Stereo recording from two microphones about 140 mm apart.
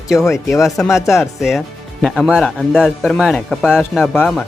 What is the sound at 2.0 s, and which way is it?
Speech, centre (ahead or behind).